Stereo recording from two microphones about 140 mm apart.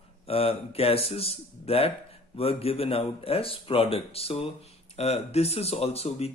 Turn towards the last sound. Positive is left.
turn(degrees=45)  # may be behind; listen again after turning